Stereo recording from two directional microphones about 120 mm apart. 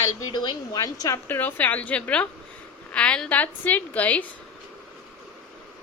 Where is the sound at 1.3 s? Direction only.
15° left (ahead or behind).